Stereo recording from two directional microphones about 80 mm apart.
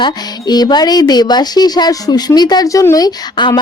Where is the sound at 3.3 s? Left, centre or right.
Left.